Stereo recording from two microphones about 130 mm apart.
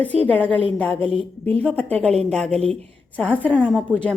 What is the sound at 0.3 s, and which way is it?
A woman's voice, 10° left (ahead or behind).